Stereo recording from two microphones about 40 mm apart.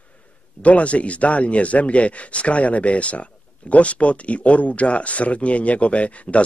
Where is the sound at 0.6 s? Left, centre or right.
Left.